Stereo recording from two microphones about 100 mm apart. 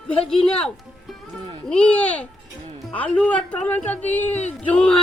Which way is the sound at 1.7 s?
10° left (ahead or behind).